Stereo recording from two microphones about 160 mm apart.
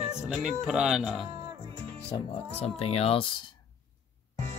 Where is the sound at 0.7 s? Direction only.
5° right (ahead or behind).